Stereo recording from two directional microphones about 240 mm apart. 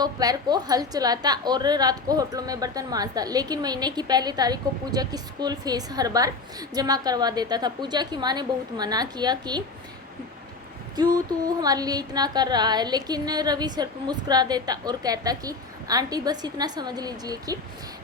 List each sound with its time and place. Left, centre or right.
0.0 s a woman's voice: centre
10.9 s a woman's voice: centre